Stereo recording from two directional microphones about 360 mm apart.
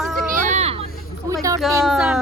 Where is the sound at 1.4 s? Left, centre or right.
Centre.